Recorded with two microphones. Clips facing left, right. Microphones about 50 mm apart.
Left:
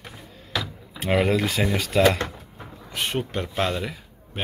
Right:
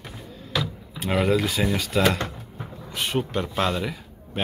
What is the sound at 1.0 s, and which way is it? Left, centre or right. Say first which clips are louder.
Speech: left 1 dB; left.